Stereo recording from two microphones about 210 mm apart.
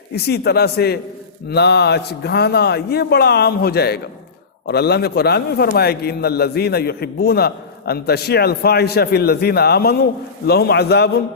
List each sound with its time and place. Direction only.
0.3 s a man's voice: 50° left (ahead or behind)